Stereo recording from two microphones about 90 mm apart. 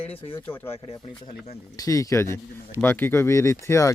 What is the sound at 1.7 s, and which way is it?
Speech, 40° left (ahead or behind).